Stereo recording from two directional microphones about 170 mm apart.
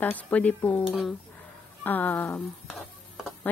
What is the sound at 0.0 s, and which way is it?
Speech, 10° left (ahead or behind).